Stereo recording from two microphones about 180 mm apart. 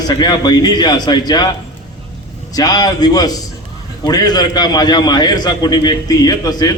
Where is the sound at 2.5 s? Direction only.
20° left (ahead or behind).